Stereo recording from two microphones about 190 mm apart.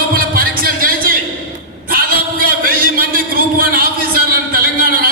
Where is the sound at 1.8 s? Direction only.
50° right (ahead or behind).